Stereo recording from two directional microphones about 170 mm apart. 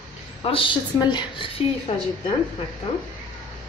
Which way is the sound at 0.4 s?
30° left (ahead or behind).